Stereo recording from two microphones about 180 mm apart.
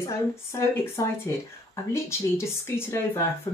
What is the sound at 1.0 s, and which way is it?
Speech, 20° left (ahead or behind).